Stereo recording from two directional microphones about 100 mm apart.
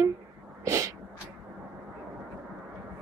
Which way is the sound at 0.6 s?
30° right (ahead or behind).